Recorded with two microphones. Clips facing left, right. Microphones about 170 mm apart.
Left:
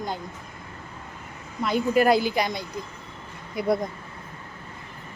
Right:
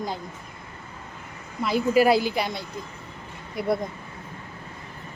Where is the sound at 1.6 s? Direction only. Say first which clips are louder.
Right 1 dB; 5° right (ahead or behind).